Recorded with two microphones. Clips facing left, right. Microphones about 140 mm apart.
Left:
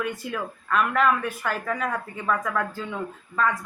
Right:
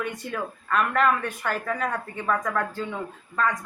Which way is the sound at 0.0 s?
5° left (ahead or behind).